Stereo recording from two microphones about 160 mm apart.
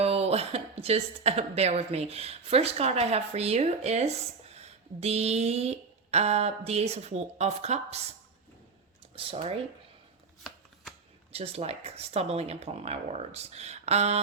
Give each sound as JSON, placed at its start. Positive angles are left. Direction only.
{"t": 0.0, "sound": "speech", "side_deg": -40}
{"t": 9.1, "sound": "speech", "side_deg": -35}
{"t": 11.3, "sound": "speech", "side_deg": -40}